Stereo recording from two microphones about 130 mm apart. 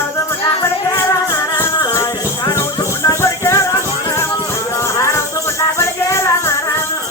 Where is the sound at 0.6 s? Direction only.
25° left (ahead or behind).